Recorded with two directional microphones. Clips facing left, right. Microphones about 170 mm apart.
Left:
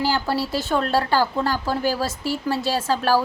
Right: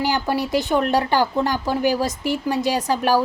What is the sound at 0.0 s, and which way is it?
A woman's voice, 15° right (ahead or behind).